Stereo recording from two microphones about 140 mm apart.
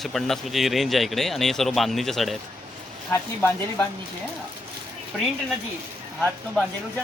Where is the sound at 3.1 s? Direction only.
15° left (ahead or behind).